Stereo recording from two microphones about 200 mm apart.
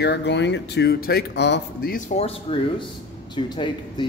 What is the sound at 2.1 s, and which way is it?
A man's voice, 30° left (ahead or behind).